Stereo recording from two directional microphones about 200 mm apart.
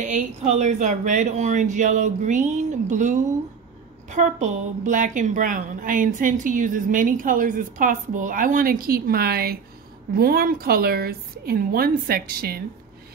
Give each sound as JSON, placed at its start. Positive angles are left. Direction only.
{"t": 0.0, "sound": "a woman's voice", "side_deg": -35}